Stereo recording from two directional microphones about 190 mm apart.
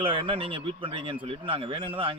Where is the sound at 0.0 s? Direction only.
25° right (ahead or behind).